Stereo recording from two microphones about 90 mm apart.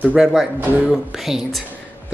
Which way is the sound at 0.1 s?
5° right (ahead or behind).